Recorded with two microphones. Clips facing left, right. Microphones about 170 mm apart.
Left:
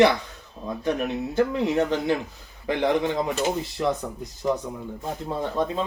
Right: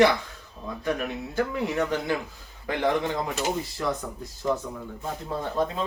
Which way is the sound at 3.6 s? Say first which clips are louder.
Left 4 dB; 20° left (ahead or behind).